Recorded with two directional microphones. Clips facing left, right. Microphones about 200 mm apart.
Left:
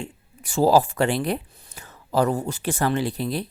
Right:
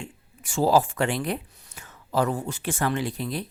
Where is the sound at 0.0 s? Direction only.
35° left (ahead or behind).